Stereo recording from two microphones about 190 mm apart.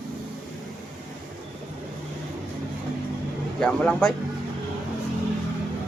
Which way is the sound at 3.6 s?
5° left (ahead or behind).